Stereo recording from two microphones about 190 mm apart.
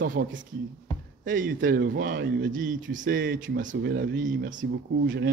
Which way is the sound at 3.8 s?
60° right (ahead or behind).